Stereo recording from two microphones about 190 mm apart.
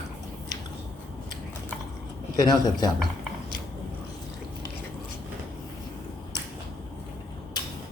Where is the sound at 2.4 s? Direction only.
20° left (ahead or behind).